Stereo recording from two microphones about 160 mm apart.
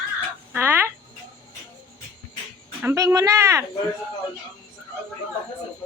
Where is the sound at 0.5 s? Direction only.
15° right (ahead or behind).